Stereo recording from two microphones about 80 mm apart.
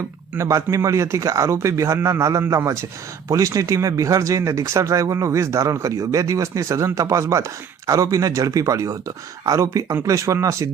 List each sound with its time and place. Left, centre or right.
0.3 s speech: right